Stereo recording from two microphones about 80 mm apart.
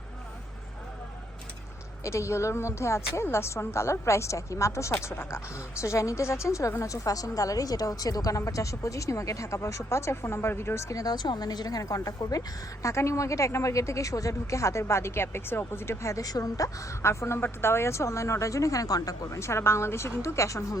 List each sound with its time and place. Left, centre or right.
2.0 s a woman's voice: left
11.0 s a woman's voice: left